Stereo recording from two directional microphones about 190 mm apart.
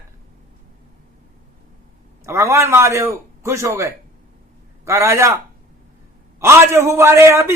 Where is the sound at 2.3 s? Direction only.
15° right (ahead or behind).